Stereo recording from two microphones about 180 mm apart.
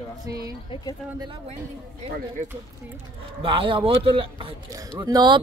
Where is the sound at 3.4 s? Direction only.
30° right (ahead or behind).